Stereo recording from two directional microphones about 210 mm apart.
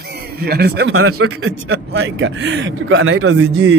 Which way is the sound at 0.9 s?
90° right.